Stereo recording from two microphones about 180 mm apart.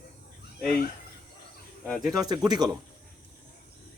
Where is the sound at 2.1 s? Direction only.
20° right (ahead or behind).